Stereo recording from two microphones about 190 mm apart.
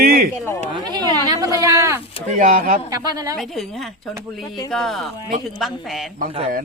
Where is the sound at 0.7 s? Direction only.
20° right (ahead or behind).